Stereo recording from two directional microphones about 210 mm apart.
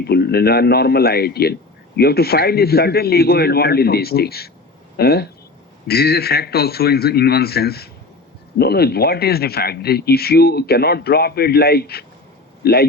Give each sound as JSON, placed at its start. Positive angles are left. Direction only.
{"t": 0.0, "sound": "speech", "side_deg": 50}